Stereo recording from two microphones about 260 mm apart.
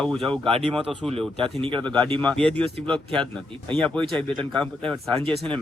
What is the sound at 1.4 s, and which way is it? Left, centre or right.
Speech, centre.